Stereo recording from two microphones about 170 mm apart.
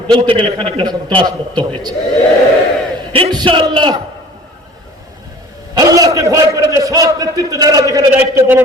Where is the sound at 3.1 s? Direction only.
30° right (ahead or behind).